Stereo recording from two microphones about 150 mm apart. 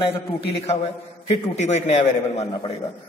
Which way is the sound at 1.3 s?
50° left (ahead or behind).